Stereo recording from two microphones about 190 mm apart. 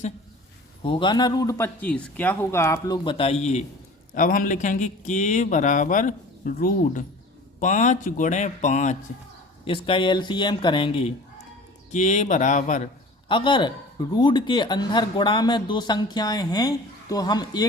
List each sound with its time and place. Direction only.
0.8 s a man's voice: 25° left (ahead or behind)
9.6 s a man's voice: 25° left (ahead or behind)
11.9 s speech: 40° left (ahead or behind)
13.2 s a man's voice: 25° left (ahead or behind)